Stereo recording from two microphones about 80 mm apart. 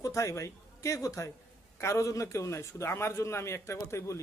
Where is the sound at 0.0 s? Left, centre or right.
Left.